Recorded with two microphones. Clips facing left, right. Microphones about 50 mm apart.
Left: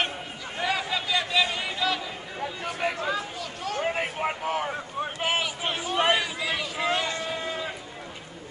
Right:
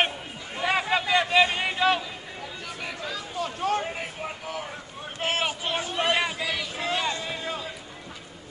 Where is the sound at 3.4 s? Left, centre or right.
Right.